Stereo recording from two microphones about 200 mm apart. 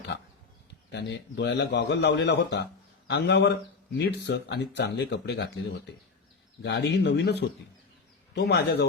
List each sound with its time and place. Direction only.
0.9 s speech: 60° left (ahead or behind)